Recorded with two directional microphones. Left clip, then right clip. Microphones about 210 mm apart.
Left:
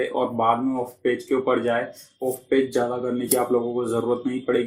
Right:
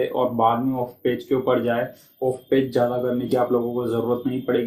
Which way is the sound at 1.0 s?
40° left (ahead or behind).